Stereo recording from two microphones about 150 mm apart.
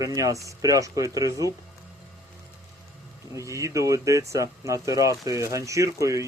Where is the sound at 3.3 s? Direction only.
20° right (ahead or behind).